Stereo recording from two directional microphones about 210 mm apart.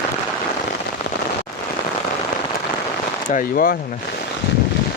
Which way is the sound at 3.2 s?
40° left (ahead or behind).